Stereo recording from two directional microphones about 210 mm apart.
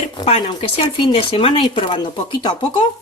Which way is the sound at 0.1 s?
25° left (ahead or behind).